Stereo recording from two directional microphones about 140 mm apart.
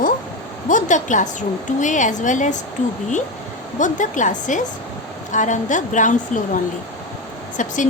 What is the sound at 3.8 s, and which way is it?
A woman's voice, 65° left (ahead or behind).